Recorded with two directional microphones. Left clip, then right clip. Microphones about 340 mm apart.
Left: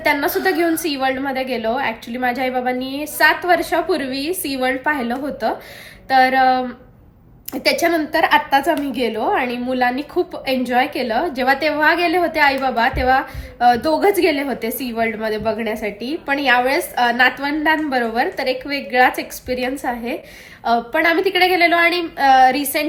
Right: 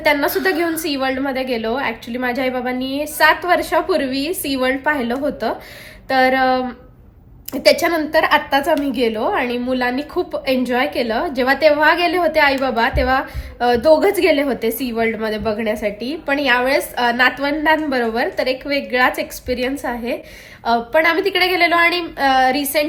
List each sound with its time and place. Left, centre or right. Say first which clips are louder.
0.0 s a woman's voice: right 1 dB; centre